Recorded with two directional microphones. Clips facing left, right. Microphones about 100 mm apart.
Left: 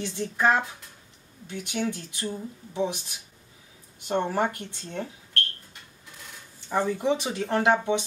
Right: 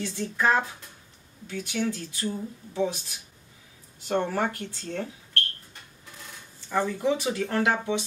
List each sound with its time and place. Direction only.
0.0 s speech: 20° left (ahead or behind)
4.1 s speech: 20° left (ahead or behind)
6.7 s speech: 20° left (ahead or behind)